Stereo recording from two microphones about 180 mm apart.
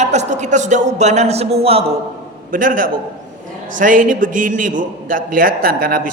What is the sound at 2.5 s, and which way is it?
A man's voice, 50° right (ahead or behind).